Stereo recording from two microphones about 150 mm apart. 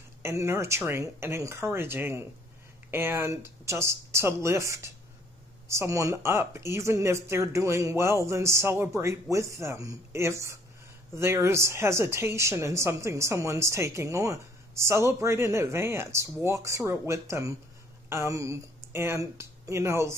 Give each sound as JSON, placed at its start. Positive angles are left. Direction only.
{"t": 0.2, "sound": "speech", "side_deg": -20}